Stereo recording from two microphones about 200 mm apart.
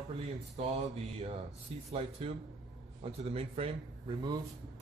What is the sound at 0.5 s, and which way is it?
Mantra, 30° right (ahead or behind).